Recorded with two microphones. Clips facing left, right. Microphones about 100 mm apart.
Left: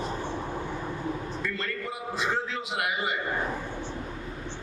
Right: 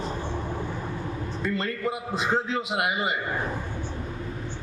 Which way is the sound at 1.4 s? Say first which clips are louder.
Right 9 dB; 20° right (ahead or behind).